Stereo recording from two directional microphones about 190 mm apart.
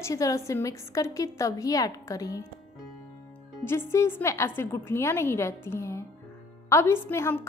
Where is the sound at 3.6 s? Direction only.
10° left (ahead or behind).